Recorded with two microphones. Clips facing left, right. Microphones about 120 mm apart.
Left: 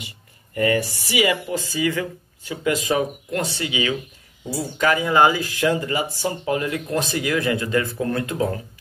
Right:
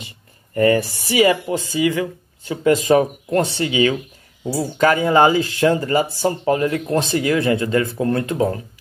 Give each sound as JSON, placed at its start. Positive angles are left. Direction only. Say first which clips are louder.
{"t": 0.6, "sound": "speech", "louder": "right 5 dB", "side_deg": -35}
{"t": 2.5, "sound": "speech", "louder": "right 7 dB", "side_deg": -35}